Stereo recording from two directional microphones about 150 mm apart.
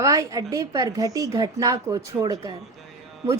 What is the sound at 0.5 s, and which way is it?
A woman's voice, 20° right (ahead or behind).